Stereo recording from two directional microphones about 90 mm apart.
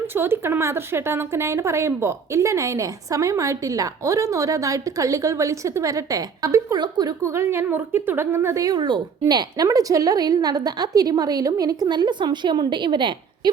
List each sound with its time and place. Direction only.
0.1 s a woman's voice: 25° right (ahead or behind); by 6.8 s 40° right (ahead or behind)
6.8 s a woman's voice: 50° right (ahead or behind)
7.2 s a woman's voice: 30° right (ahead or behind)
9.3 s a woman's voice: 50° right (ahead or behind)